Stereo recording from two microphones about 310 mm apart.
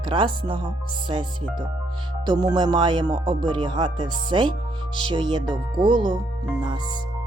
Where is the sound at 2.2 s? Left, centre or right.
Centre.